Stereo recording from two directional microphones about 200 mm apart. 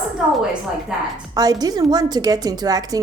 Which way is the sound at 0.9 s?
5° right (ahead or behind).